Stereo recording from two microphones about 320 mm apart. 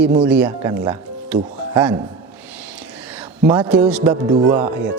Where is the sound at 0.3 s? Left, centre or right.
Centre.